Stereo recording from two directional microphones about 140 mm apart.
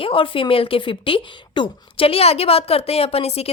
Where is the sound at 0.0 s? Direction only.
40° left (ahead or behind).